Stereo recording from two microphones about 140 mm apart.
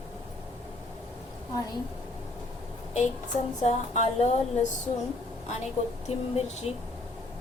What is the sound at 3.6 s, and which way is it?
Speech, 50° left (ahead or behind).